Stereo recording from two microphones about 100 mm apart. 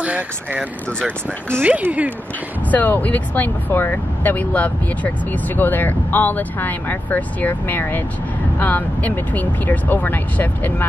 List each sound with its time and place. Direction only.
0.0 s speech: 15° right (ahead or behind)
2.7 s speech: 15° left (ahead or behind)